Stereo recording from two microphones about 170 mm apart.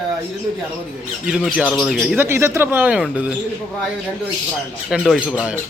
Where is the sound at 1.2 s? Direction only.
5° right (ahead or behind).